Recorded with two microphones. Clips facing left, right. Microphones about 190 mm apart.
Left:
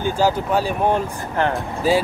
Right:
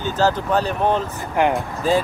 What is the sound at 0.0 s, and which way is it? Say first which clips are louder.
Speech: left 1 dB; 10° left (ahead or behind).